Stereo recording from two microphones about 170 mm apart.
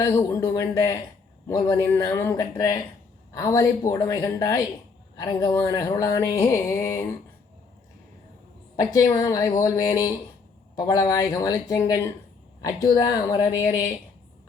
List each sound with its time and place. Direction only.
0.0 s speech: 20° left (ahead or behind)
8.7 s speech: 20° left (ahead or behind)